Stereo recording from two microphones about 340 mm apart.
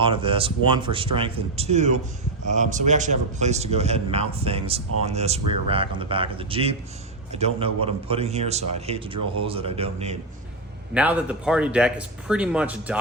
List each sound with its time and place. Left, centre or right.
0.0 s a man's voice: centre
10.9 s a man's voice: centre